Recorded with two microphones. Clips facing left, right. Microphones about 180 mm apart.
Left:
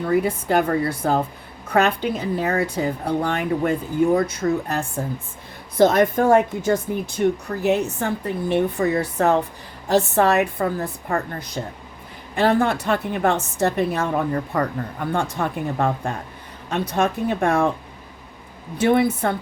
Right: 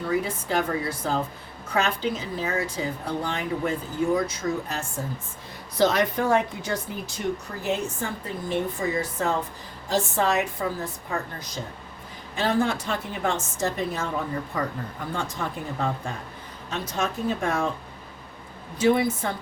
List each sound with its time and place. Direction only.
0.1 s speech: 60° left (ahead or behind)
18.8 s speech: 60° left (ahead or behind)